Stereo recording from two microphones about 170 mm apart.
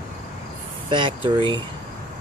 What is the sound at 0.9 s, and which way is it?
Speech, 30° right (ahead or behind).